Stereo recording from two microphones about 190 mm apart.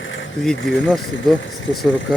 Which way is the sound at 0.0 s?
85° left.